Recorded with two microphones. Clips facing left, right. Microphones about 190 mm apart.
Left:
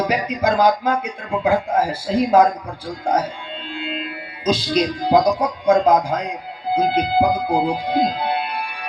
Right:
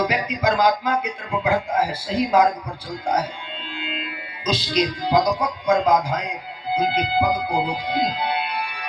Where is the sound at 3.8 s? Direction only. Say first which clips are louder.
Left 4 dB; 45° left (ahead or behind).